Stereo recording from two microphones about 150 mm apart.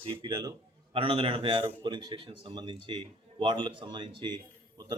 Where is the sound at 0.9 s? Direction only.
35° right (ahead or behind).